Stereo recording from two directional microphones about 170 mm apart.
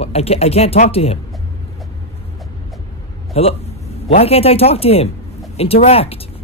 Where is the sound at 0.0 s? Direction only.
35° left (ahead or behind).